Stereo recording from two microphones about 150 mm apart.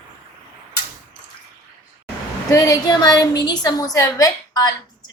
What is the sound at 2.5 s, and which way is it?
A woman's voice, 25° left (ahead or behind).